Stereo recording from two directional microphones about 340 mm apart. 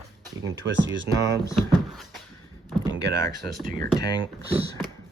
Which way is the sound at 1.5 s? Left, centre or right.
Centre.